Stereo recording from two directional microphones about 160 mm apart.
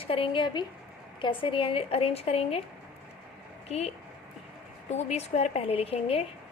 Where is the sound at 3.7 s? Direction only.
40° left (ahead or behind).